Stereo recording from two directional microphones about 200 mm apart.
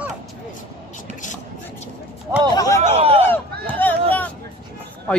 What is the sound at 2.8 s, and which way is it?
Speech, 30° right (ahead or behind).